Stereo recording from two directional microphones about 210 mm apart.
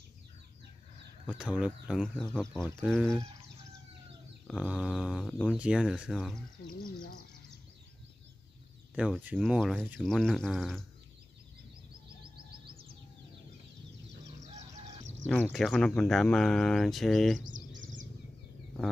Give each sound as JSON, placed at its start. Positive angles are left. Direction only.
{"t": 1.3, "sound": "speech", "side_deg": -5}
{"t": 4.5, "sound": "speech", "side_deg": 0}
{"t": 6.7, "sound": "speech", "side_deg": 45}
{"t": 8.9, "sound": "speech", "side_deg": -5}
{"t": 15.2, "sound": "speech", "side_deg": 5}